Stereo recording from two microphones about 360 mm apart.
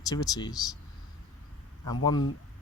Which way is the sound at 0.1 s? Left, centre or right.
Centre.